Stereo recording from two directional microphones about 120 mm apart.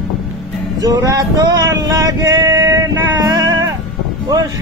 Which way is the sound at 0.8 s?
30° right (ahead or behind).